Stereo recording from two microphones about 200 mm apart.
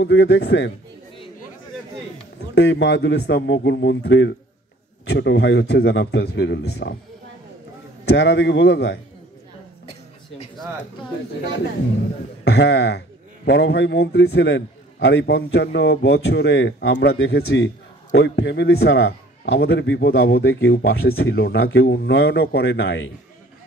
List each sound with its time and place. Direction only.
0.0 s a man's voice: 60° left (ahead or behind)
2.5 s a man's voice: 60° left (ahead or behind)
8.0 s a man's voice: 60° left (ahead or behind)
12.4 s a man's voice: 55° left (ahead or behind)